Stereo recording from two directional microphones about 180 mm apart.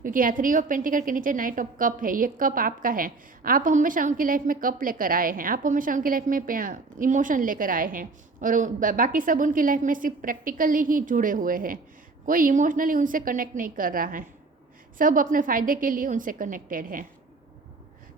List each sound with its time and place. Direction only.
0.0 s a woman's voice: 50° right (ahead or behind)